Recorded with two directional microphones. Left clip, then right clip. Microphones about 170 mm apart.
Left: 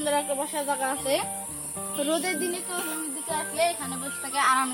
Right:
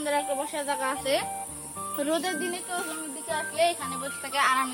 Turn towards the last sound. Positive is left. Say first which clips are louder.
# left 1 dB
turn(degrees=-20)  # may be behind; listen again after turning